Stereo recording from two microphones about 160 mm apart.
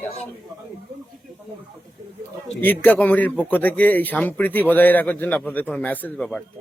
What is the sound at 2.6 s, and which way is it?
Speech, 10° left (ahead or behind).